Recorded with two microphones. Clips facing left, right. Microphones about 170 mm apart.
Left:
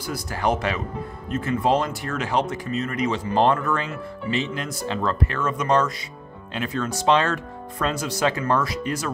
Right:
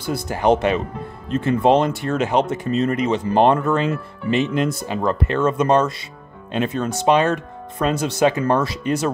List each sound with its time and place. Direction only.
0.0 s speech: 25° right (ahead or behind)